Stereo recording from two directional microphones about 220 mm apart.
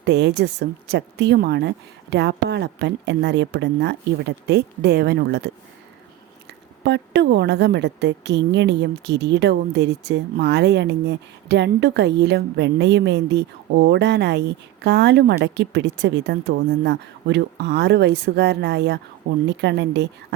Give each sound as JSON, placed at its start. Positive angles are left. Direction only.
{"t": 0.0, "sound": "a woman's voice", "side_deg": -50}
{"t": 6.8, "sound": "a woman's voice", "side_deg": -50}